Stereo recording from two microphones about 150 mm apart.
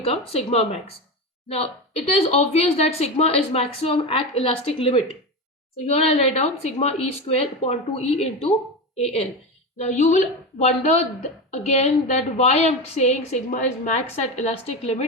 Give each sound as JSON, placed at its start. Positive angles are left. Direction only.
{"t": 0.0, "sound": "a woman's voice", "side_deg": 40}